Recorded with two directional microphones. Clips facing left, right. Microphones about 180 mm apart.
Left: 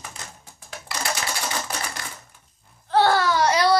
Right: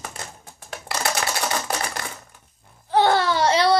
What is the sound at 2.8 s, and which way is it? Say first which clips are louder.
Baby cry: right 1 dB; 20° right (ahead or behind).